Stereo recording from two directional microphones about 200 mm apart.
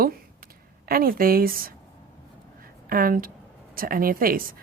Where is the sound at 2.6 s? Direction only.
45° right (ahead or behind).